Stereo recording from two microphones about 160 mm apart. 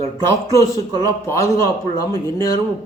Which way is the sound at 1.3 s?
15° left (ahead or behind).